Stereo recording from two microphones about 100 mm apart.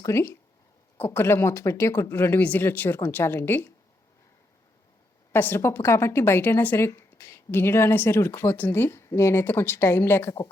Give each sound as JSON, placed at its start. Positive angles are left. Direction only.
{"t": 0.0, "sound": "speech", "side_deg": 30}
{"t": 5.3, "sound": "speech", "side_deg": 20}